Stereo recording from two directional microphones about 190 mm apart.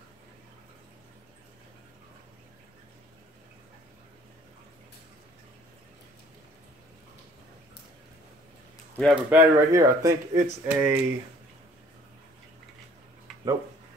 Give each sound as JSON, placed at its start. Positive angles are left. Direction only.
{"t": 8.9, "sound": "speech", "side_deg": 5}
{"t": 9.3, "sound": "speech", "side_deg": -15}